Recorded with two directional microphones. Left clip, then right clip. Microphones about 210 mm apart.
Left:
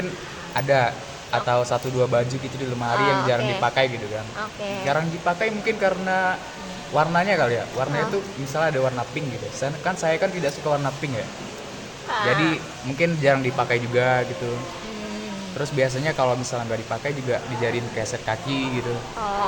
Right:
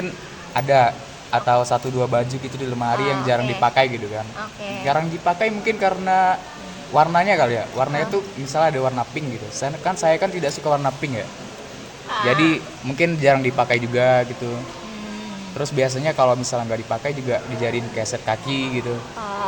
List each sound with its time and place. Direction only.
0.5 s speech: 25° right (ahead or behind)
3.0 s a man's voice: 20° left (ahead or behind)
3.6 s speech: 30° right (ahead or behind)
4.4 s speech: 15° left (ahead or behind)
4.9 s speech: 30° right (ahead or behind)
12.3 s speech: 30° right (ahead or behind)
15.6 s speech: 25° right (ahead or behind)